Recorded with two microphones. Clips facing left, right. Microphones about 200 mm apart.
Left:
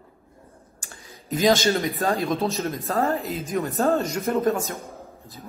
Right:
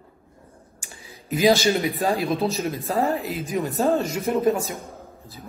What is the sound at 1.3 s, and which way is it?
Speech, 15° right (ahead or behind).